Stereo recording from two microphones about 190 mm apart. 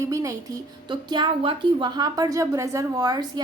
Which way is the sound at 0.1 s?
15° right (ahead or behind).